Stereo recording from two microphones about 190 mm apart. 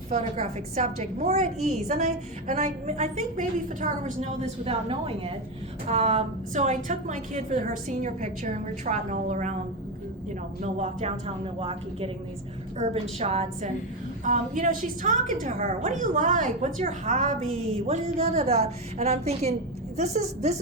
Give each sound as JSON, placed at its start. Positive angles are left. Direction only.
{"t": 0.1, "sound": "a woman's voice", "side_deg": -35}
{"t": 10.6, "sound": "a woman's voice", "side_deg": -35}